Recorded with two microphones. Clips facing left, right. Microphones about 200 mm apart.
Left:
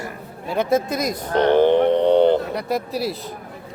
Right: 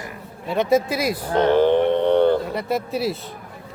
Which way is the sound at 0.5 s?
Centre (ahead or behind).